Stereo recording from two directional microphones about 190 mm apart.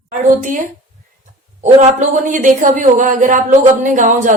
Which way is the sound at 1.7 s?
35° right (ahead or behind).